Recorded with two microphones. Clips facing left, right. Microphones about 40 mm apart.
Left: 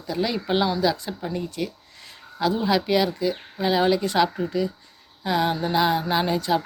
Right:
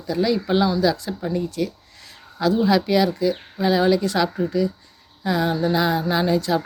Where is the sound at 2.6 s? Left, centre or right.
Centre.